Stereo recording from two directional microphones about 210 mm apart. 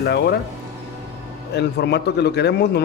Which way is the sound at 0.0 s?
50° left (ahead or behind).